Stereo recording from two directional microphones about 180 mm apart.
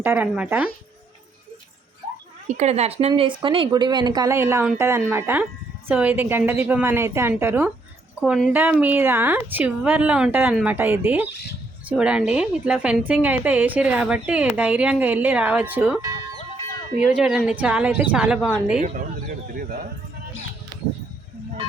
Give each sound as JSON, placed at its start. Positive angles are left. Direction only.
{"t": 0.0, "sound": "a woman's voice", "side_deg": -10}
{"t": 2.6, "sound": "a woman's voice", "side_deg": -35}
{"t": 17.0, "sound": "a woman's voice", "side_deg": -5}
{"t": 18.8, "sound": "speech", "side_deg": -45}